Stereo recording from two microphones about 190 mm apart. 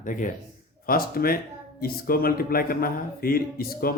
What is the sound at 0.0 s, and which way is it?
A man's voice, 40° left (ahead or behind).